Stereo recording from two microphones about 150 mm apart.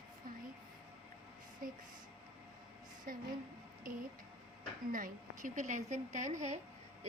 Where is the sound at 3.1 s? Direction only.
70° right (ahead or behind).